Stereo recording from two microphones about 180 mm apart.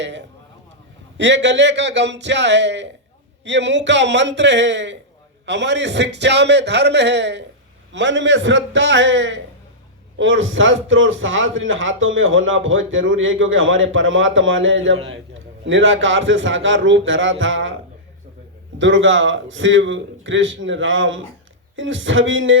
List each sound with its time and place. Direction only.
1.2 s a man's voice: 75° right (ahead or behind)
5.5 s a man's voice: 80° right
18.8 s a man's voice: 90° right